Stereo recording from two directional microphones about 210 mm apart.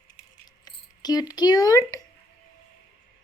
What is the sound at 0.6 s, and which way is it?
Speech, 20° left (ahead or behind).